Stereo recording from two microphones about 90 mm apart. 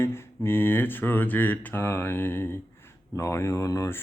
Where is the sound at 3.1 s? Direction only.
30° left (ahead or behind).